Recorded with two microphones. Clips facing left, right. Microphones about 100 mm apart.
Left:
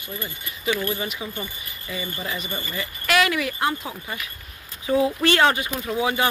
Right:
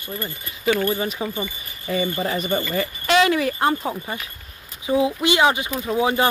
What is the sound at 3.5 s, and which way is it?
Speech, 40° right (ahead or behind).